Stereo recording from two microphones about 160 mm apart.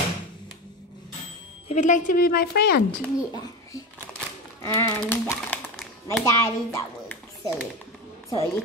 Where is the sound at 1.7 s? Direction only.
50° left (ahead or behind); by 2.8 s 80° left.